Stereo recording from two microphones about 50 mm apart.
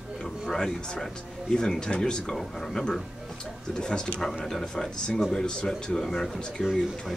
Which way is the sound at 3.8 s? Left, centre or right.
Centre.